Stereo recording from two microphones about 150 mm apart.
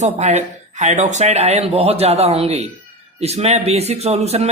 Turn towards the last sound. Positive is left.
turn(degrees=-45)  # may be behind; listen again after turning